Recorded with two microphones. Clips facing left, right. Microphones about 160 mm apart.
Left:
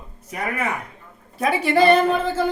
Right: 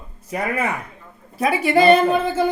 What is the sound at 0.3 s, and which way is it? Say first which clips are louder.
Speech: right 3 dB; 30° right (ahead or behind).